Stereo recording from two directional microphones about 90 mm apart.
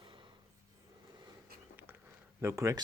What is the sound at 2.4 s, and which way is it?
Speech, 35° right (ahead or behind).